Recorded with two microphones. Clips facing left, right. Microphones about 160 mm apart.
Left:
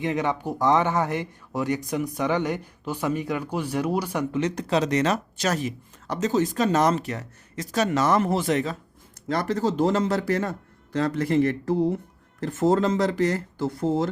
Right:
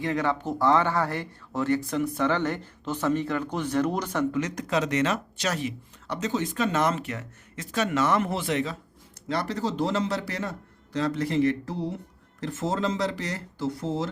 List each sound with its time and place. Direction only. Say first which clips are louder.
0.0 s speech: left 1 dB; 20° left (ahead or behind)
4.4 s speech: left 3 dB; 30° left (ahead or behind); by 14.1 s 50° left (ahead or behind)